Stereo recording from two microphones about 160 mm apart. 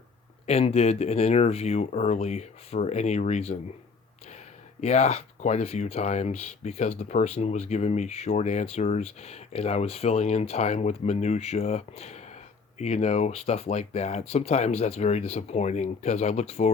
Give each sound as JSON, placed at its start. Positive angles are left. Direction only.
{"t": 0.4, "sound": "speech", "side_deg": 40}
{"t": 4.8, "sound": "speech", "side_deg": 45}